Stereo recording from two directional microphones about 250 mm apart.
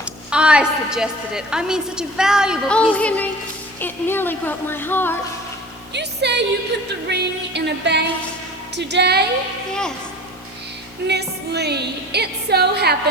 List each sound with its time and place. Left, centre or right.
0.0 s a woman's voice: centre
5.9 s music: right
7.1 s a woman's voice: right
11.0 s a woman's voice: right